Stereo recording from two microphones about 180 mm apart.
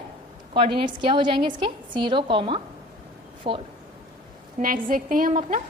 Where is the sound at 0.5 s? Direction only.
30° right (ahead or behind).